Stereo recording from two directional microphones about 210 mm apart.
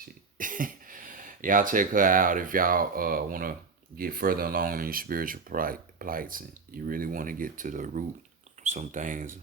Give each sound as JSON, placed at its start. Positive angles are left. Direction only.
{"t": 0.3, "sound": "speech", "side_deg": -40}